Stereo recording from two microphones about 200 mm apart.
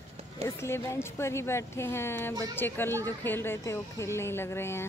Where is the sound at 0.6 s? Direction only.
15° left (ahead or behind).